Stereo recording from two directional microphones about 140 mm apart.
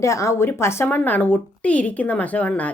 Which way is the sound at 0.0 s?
20° left (ahead or behind).